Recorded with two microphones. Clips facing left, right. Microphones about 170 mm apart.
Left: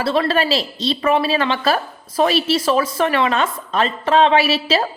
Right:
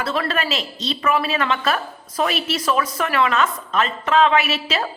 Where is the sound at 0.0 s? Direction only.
30° left (ahead or behind).